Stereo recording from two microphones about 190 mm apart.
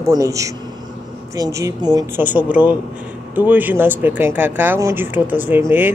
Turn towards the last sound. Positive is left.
turn(degrees=-10)  # may be behind; listen again after turning